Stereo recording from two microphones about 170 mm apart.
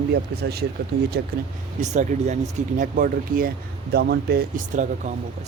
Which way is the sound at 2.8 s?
55° right (ahead or behind).